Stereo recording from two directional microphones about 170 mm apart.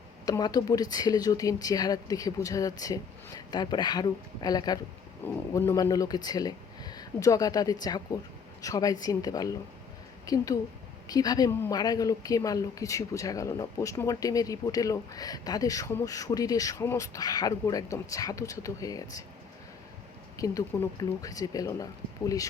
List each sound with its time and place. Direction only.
0.3 s speech: 20° left (ahead or behind)
5.2 s speech: 10° left (ahead or behind)
20.3 s speech: 20° left (ahead or behind)